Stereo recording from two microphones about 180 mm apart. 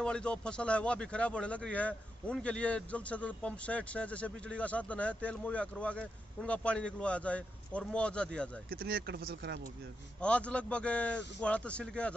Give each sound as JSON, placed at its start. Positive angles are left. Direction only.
{"t": 0.0, "sound": "speech", "side_deg": 5}
{"t": 8.6, "sound": "speech", "side_deg": -55}
{"t": 10.2, "sound": "speech", "side_deg": 5}